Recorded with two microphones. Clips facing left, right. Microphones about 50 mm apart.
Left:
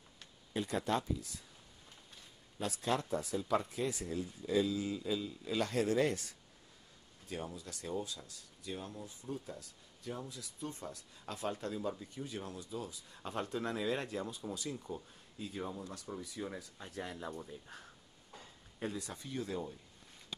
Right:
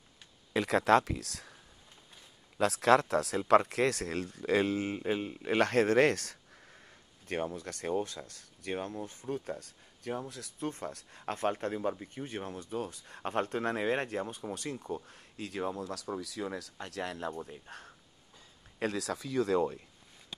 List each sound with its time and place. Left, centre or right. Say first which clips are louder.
0.5 s speech: right 9 dB; right
2.5 s speech: right 11 dB; right
7.5 s speech: right 7 dB; right
15.0 s speech: right 4 dB; right
17.5 s speech: right 3 dB; right
18.8 s speech: right 8 dB; right